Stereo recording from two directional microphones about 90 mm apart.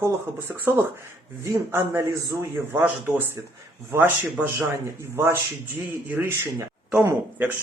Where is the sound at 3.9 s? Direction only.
20° right (ahead or behind).